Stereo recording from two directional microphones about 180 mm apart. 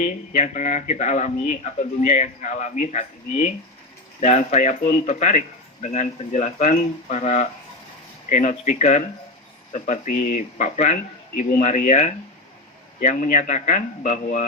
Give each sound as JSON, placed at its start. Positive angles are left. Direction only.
{"t": 0.0, "sound": "speech", "side_deg": 40}